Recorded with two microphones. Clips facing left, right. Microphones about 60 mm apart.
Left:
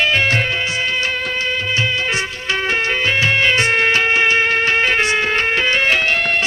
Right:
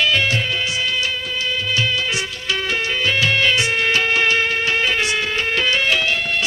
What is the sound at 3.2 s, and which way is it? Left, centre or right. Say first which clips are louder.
Music: left 2 dB; left.